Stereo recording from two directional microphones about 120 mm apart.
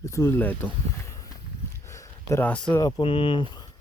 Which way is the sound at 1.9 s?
25° left (ahead or behind).